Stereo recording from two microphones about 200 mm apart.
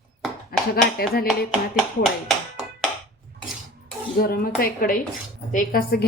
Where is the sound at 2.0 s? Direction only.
Centre (ahead or behind).